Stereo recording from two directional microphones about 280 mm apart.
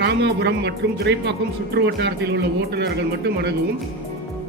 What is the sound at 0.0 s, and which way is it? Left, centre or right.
Speech, right.